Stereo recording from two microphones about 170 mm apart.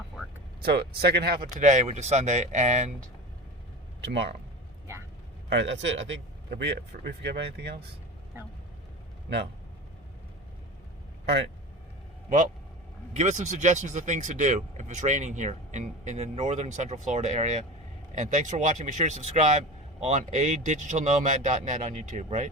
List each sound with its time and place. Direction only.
0.6 s speech: 70° right (ahead or behind); by 2.9 s 45° right (ahead or behind)
4.1 s speech: 80° right
5.5 s a man's voice: 90° right
11.3 s a man's voice: 90° right
13.1 s speech: 40° right (ahead or behind)